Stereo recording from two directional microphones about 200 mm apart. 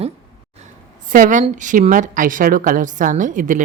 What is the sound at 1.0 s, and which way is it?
A woman's voice, 40° right (ahead or behind).